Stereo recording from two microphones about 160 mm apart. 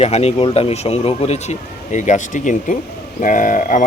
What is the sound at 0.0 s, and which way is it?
Speech, 40° left (ahead or behind).